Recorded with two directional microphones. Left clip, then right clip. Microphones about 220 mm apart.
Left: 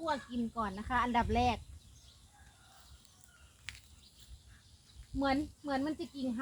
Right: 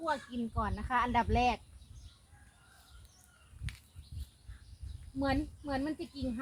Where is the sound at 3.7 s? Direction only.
10° left (ahead or behind).